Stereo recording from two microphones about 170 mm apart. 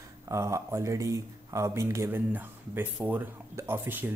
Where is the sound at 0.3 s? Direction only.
15° right (ahead or behind).